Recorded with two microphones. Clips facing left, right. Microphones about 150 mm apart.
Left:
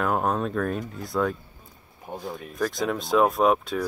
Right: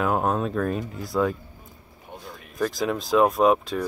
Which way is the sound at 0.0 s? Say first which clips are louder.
Right 1 dB; centre (ahead or behind).